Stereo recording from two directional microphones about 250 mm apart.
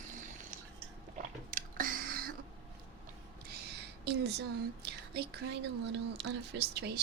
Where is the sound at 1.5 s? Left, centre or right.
Right.